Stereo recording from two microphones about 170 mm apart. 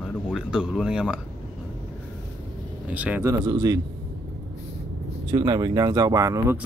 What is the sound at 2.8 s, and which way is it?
Speech, 10° right (ahead or behind).